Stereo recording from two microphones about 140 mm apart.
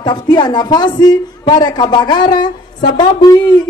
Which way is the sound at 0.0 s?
30° left (ahead or behind).